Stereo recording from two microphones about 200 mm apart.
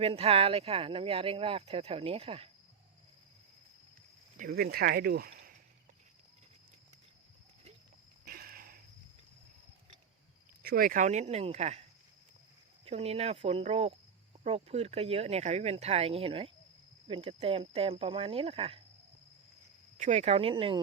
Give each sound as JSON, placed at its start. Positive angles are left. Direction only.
{"t": 0.0, "sound": "speech", "side_deg": -30}
{"t": 4.4, "sound": "speech", "side_deg": -50}
{"t": 8.2, "sound": "a sound", "side_deg": -45}
{"t": 10.6, "sound": "speech", "side_deg": -50}
{"t": 20.0, "sound": "speech", "side_deg": -35}